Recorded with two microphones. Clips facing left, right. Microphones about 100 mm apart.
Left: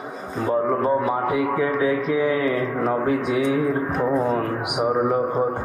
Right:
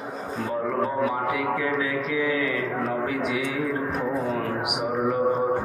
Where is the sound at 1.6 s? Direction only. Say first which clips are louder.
Left 5 dB; 35° left (ahead or behind).